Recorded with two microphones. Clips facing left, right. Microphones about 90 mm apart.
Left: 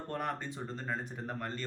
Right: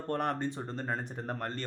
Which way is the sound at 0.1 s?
55° right (ahead or behind).